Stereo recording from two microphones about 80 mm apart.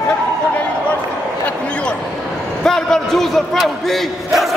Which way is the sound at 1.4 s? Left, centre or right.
Centre.